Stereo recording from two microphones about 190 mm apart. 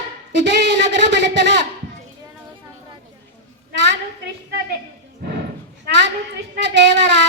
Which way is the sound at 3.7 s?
65° right (ahead or behind).